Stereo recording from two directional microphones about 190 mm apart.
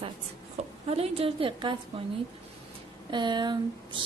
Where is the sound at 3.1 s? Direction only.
25° right (ahead or behind).